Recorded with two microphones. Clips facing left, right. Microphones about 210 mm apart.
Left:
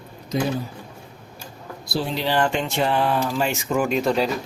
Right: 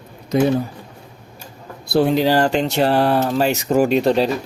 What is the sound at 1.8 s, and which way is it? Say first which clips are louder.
Speech: right 9 dB; 55° right (ahead or behind).